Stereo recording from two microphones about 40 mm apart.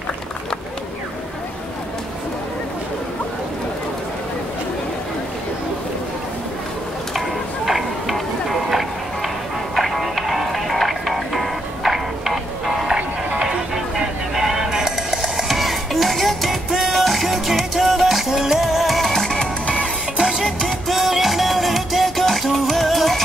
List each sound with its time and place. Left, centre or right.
7.2 s a sound: centre
9.8 s music: centre
12.9 s music: right; by 19.4 s centre
19.6 s music: left
20.2 s music: centre
20.6 s music: centre